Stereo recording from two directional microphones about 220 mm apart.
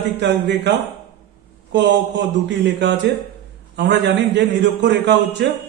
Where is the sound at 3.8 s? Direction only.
50° right (ahead or behind).